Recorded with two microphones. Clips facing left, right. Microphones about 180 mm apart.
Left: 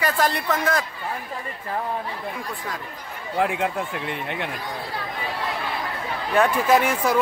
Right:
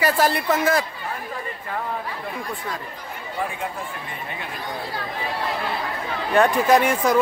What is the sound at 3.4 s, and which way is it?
Speech, 80° left.